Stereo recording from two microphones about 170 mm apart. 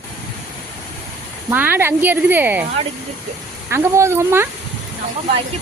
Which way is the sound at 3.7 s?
15° right (ahead or behind).